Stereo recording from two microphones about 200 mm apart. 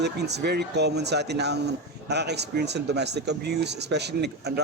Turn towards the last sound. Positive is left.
turn(degrees=-55)  # may be behind; listen again after turning